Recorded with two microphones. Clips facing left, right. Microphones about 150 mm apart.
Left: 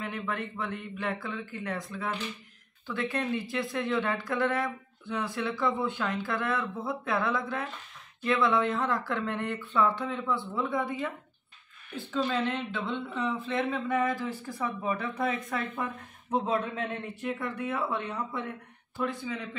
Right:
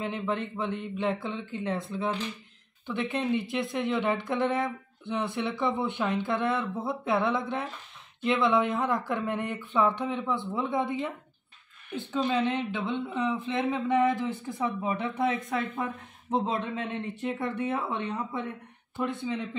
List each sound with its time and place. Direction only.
0.0 s speech: 25° right (ahead or behind)